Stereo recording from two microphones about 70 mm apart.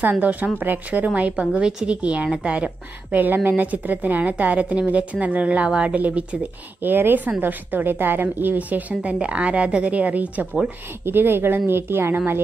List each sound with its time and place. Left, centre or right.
0.0 s a woman's voice: right
11.1 s speech: right